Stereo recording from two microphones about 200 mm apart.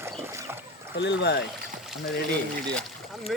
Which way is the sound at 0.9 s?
60° left (ahead or behind).